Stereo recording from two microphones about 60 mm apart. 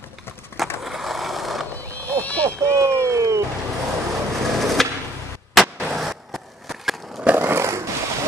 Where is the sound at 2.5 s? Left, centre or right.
Right.